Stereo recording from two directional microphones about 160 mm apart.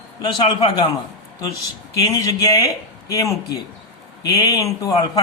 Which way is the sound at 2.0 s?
20° left (ahead or behind).